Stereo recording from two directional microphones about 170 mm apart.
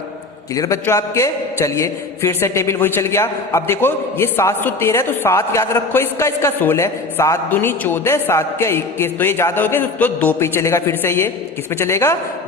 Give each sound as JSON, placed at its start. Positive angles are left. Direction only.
{"t": 0.5, "sound": "a man's voice", "side_deg": 20}